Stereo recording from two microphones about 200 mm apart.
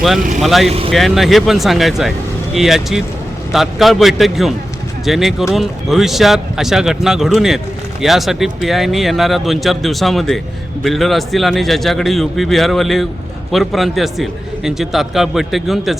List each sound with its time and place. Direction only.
0.3 s a man's voice: centre (ahead or behind)